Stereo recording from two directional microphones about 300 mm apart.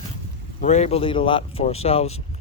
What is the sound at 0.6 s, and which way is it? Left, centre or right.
Speech, left.